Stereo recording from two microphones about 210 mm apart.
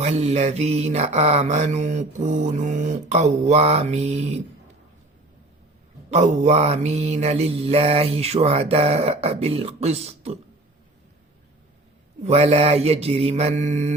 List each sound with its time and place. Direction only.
0.0 s mantra: 30° right (ahead or behind)
6.1 s mantra: 35° right (ahead or behind)
12.2 s mantra: 30° right (ahead or behind)